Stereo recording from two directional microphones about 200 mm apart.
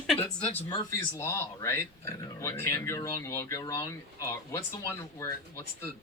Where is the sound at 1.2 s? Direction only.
15° left (ahead or behind).